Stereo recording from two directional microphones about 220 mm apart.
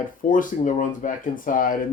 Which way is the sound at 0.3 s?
35° left (ahead or behind).